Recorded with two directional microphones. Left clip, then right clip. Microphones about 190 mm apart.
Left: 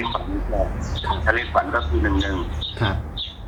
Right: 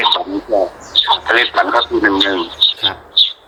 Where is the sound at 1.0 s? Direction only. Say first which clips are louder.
Right 10 dB; 45° right (ahead or behind).